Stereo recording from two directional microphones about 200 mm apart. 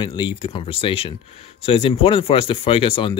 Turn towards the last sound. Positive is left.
turn(degrees=25)  # may be behind; listen again after turning